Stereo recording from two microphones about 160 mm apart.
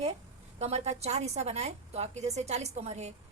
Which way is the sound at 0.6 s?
40° right (ahead or behind).